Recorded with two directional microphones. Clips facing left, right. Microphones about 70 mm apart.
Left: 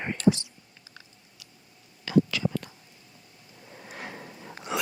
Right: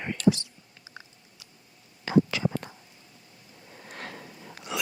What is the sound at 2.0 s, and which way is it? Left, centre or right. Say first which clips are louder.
Whispering: even; right.